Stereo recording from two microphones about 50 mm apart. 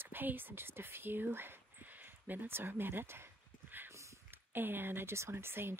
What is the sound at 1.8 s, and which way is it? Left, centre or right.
Speech, right.